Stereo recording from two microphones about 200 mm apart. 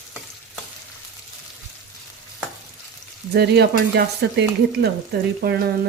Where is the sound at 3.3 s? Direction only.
55° right (ahead or behind).